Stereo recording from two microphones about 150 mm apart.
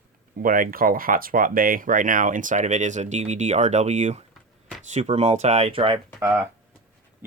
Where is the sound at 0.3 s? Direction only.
70° right (ahead or behind); by 6.0 s 35° right (ahead or behind).